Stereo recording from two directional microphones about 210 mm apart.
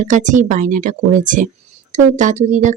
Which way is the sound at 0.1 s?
35° right (ahead or behind).